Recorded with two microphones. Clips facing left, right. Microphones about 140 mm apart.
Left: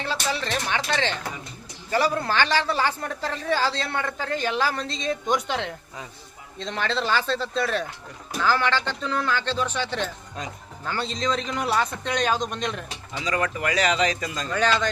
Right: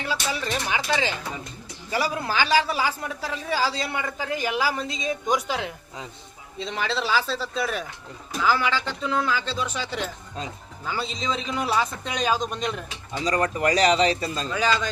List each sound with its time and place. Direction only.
0.0 s a man's voice: 10° right (ahead or behind)
13.2 s speech: 35° right (ahead or behind)
14.5 s speech: 5° right (ahead or behind)